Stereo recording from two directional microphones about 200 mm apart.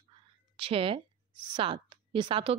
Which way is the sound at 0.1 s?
25° right (ahead or behind).